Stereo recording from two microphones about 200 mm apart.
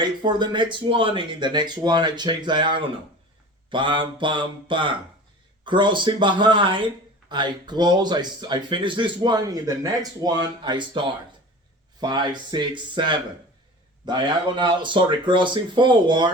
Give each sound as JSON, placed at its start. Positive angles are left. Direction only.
{"t": 0.0, "sound": "speech", "side_deg": -20}